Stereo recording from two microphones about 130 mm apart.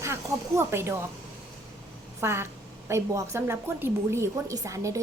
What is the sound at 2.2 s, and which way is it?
A woman's voice, 20° right (ahead or behind).